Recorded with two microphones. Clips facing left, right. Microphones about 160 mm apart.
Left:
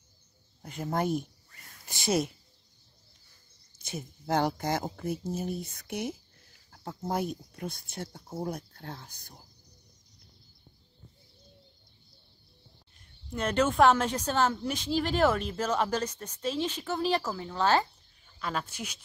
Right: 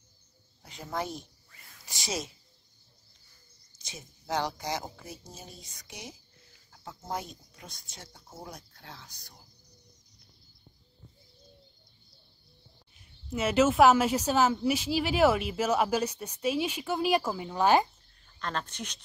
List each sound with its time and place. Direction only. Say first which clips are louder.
0.6 s speech: left 4 dB; 50° left (ahead or behind)
3.7 s speech: left 9 dB; 55° left (ahead or behind)
12.9 s speech: right 2 dB; 5° right (ahead or behind)
18.2 s speech: left 1 dB; 5° left (ahead or behind)